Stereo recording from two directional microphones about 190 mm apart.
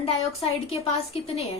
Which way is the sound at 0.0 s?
30° left (ahead or behind).